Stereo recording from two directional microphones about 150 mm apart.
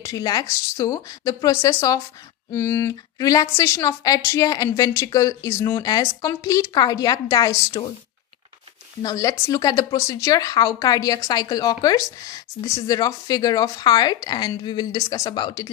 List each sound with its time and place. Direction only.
0.0 s speech: 25° left (ahead or behind)
9.0 s speech: 25° left (ahead or behind)